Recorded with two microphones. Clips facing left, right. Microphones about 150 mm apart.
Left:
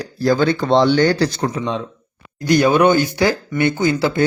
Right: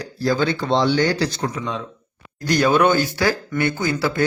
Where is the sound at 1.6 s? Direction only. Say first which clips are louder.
Left 5 dB; 25° left (ahead or behind).